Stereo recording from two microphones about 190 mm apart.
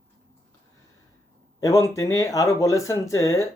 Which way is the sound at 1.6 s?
15° left (ahead or behind).